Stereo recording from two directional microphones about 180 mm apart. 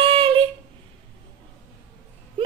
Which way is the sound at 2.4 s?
30° right (ahead or behind).